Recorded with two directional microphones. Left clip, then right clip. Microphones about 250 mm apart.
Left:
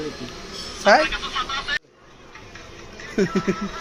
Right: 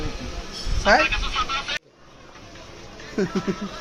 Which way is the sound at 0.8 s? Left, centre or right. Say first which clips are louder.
Left 2 dB; centre.